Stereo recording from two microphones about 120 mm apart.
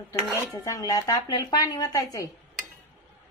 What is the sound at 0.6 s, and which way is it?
Speech, 30° left (ahead or behind).